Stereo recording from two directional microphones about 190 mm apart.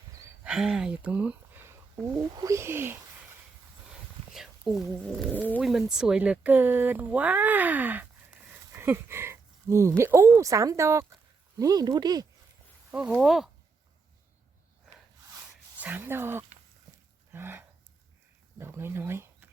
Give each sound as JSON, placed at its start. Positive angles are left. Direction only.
{"t": 0.4, "sound": "speech", "side_deg": -5}
{"t": 4.4, "sound": "speech", "side_deg": 0}
{"t": 8.7, "sound": "a sound", "side_deg": -10}
{"t": 10.0, "sound": "speech", "side_deg": -15}
{"t": 12.9, "sound": "speech", "side_deg": -5}
{"t": 15.8, "sound": "speech", "side_deg": -10}